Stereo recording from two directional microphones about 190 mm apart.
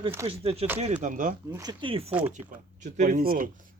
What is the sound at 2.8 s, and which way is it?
Speech, 40° right (ahead or behind).